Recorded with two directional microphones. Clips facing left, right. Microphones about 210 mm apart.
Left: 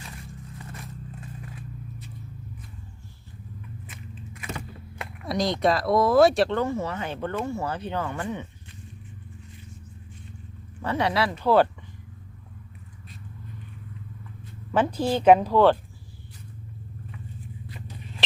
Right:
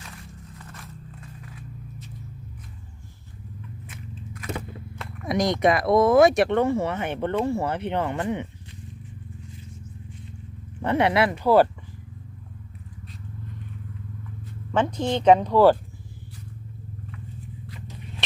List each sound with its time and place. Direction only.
5.2 s speech: 20° right (ahead or behind)
10.9 s speech: 55° right (ahead or behind)
11.4 s speech: 10° right (ahead or behind)
14.7 s speech: 5° left (ahead or behind)